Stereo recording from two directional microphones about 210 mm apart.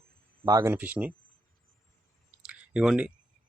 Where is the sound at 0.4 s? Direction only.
15° right (ahead or behind).